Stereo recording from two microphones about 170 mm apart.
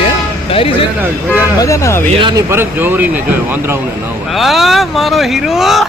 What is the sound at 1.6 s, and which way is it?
Speech, 20° left (ahead or behind).